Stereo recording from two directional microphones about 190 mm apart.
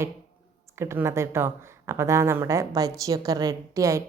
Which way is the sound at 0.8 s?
15° right (ahead or behind).